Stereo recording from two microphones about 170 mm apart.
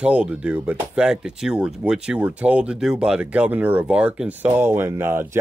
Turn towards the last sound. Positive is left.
turn(degrees=-15)  # may be behind; listen again after turning